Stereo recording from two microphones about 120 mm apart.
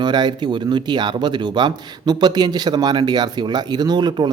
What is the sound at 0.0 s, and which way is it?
A man's voice, 40° right (ahead or behind).